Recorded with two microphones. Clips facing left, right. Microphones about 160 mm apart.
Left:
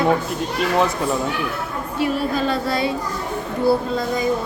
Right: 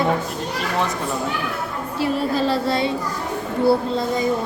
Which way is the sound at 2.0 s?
30° right (ahead or behind).